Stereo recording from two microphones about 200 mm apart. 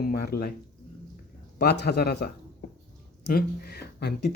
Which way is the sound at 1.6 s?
55° left (ahead or behind).